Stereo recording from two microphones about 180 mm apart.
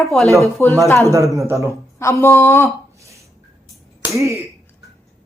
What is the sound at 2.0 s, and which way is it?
Speech, 15° left (ahead or behind).